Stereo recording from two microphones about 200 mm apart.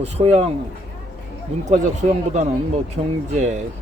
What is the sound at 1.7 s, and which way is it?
Speech, 35° right (ahead or behind).